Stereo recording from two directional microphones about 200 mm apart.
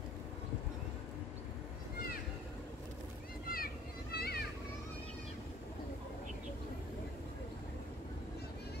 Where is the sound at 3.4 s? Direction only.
45° left (ahead or behind).